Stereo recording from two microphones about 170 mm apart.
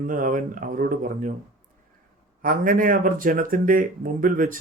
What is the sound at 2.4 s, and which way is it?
Speech, 55° right (ahead or behind).